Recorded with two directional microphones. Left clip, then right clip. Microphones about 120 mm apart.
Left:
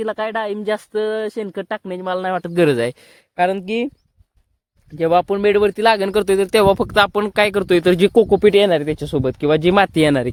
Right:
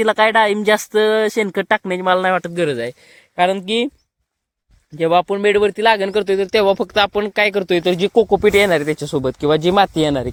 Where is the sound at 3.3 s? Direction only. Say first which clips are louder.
Right 2 dB; 25° left (ahead or behind).